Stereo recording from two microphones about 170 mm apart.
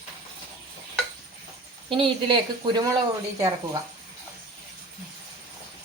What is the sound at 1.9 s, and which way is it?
A woman's voice, 30° right (ahead or behind).